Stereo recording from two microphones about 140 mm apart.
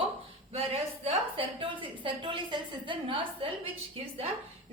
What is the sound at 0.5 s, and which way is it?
A woman's voice, 45° right (ahead or behind).